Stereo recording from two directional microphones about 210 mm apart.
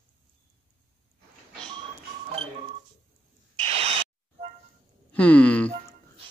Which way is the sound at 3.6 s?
25° right (ahead or behind).